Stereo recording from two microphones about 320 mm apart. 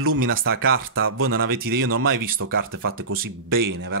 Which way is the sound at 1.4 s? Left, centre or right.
Right.